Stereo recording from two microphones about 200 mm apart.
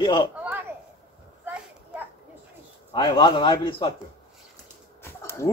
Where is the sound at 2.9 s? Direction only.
20° left (ahead or behind).